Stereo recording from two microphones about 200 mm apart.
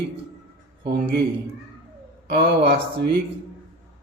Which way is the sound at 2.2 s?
50° right (ahead or behind).